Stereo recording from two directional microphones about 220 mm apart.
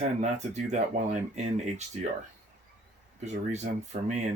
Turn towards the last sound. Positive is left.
turn(degrees=-30)  # may be behind; listen again after turning